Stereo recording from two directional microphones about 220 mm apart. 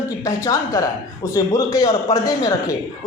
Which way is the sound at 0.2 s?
15° left (ahead or behind).